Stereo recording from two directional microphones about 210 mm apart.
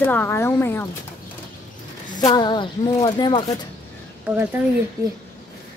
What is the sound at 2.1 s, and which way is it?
Speech, 20° left (ahead or behind).